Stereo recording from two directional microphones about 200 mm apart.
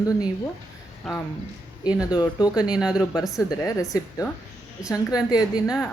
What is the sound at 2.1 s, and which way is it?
Speech, 20° left (ahead or behind).